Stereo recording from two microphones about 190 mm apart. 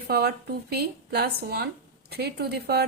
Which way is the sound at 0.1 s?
55° right (ahead or behind).